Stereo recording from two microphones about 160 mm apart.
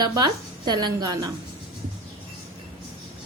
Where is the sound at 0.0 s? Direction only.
25° right (ahead or behind).